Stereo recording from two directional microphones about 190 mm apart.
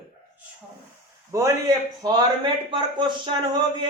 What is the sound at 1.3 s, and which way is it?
A man's voice, 15° right (ahead or behind).